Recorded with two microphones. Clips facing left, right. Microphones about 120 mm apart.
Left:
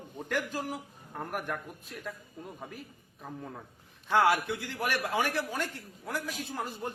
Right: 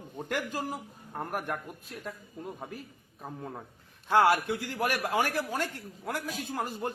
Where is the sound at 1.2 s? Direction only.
45° right (ahead or behind).